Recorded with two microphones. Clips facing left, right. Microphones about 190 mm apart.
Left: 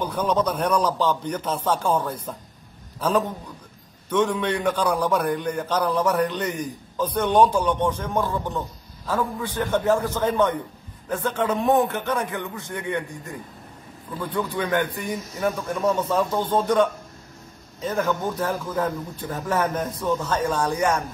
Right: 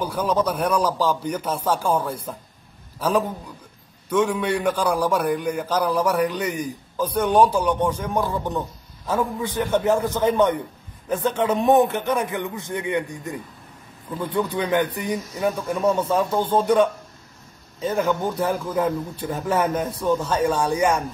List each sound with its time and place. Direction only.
0.0 s a man's voice: 10° right (ahead or behind)
14.3 s a man's voice: 20° right (ahead or behind)
17.9 s a man's voice: 15° right (ahead or behind)